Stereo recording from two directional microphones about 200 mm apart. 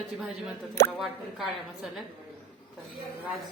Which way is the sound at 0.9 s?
Centre (ahead or behind).